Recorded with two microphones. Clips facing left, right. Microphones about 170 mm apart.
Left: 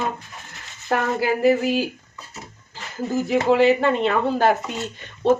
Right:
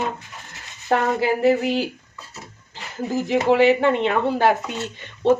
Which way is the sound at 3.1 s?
15° right (ahead or behind).